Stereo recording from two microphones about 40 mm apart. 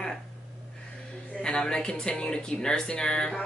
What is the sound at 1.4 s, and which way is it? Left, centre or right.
Speech, left.